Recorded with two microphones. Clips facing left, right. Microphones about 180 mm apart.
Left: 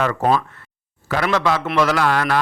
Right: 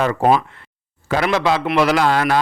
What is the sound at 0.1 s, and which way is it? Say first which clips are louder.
A man's voice: right 3 dB; 15° right (ahead or behind).